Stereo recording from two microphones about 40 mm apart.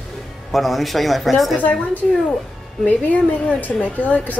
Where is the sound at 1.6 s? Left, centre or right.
Left.